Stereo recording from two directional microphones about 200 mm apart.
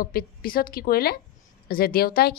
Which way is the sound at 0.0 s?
50° left (ahead or behind).